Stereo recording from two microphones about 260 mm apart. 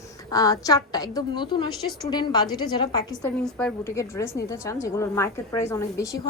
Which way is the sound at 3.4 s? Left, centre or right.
Centre.